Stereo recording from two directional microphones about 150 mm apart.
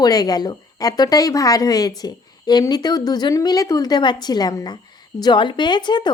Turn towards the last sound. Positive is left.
turn(degrees=30)  # may be behind; listen again after turning